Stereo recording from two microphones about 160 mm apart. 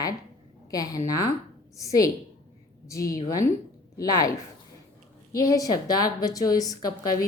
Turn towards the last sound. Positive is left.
turn(degrees=20)  # may be behind; listen again after turning